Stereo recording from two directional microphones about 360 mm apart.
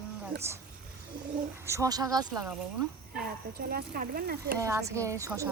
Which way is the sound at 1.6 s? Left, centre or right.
Centre.